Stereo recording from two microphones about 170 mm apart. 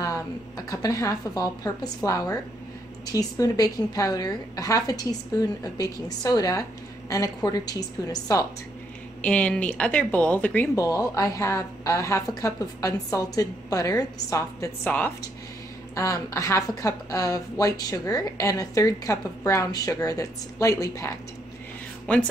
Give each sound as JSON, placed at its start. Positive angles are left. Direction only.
{"t": 0.0, "sound": "a woman's voice", "side_deg": 20}
{"t": 9.2, "sound": "a woman's voice", "side_deg": 5}
{"t": 22.1, "sound": "speech", "side_deg": 10}